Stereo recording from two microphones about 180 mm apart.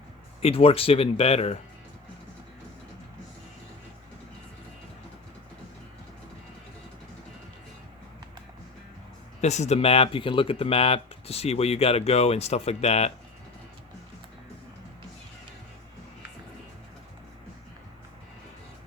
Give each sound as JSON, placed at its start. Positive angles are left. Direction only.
{"t": 0.4, "sound": "speech", "side_deg": 35}
{"t": 9.4, "sound": "speech", "side_deg": 40}